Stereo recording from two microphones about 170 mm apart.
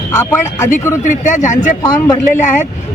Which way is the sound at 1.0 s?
45° left (ahead or behind).